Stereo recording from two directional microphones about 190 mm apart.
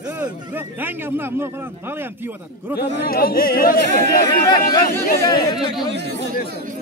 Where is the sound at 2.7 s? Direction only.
50° left (ahead or behind).